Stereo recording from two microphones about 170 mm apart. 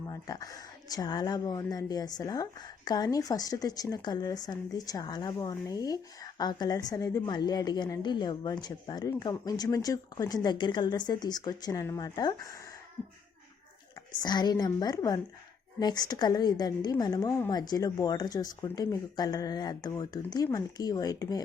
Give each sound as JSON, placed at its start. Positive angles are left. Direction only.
{"t": 0.1, "sound": "a woman's voice", "side_deg": 20}
{"t": 14.2, "sound": "a woman's voice", "side_deg": 25}